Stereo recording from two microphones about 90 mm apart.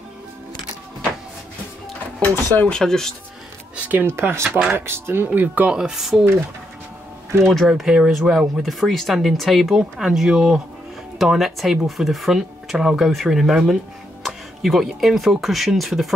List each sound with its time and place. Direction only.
2.5 s speech: 15° left (ahead or behind)
2.8 s speech: 5° left (ahead or behind)
3.7 s speech: 20° right (ahead or behind)
4.5 s speech: 15° right (ahead or behind)
4.7 s speech: 25° right (ahead or behind)
5.8 s speech: 5° right (ahead or behind)
7.4 s speech: centre (ahead or behind)